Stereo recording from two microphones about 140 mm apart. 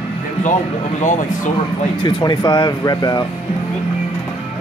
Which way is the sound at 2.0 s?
35° left (ahead or behind).